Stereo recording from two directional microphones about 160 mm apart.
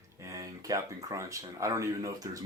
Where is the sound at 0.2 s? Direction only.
20° right (ahead or behind).